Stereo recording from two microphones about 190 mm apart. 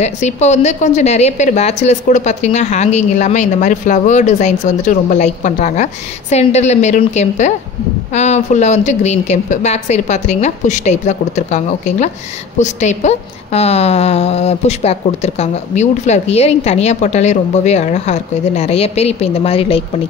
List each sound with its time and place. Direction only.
0.0 s a woman's voice: 35° left (ahead or behind)